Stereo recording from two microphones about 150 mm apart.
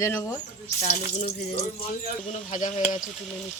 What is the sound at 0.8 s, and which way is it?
Speech, 50° left (ahead or behind).